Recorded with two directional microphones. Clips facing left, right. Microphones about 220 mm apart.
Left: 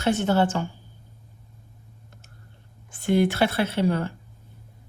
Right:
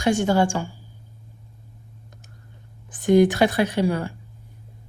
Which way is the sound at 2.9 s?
15° right (ahead or behind).